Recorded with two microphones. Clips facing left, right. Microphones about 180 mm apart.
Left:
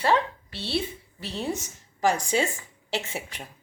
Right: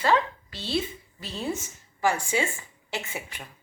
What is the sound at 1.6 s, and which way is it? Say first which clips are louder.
A woman's voice: left 3 dB; 40° left (ahead or behind).